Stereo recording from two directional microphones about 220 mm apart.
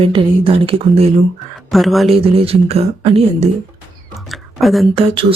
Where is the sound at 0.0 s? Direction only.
25° right (ahead or behind).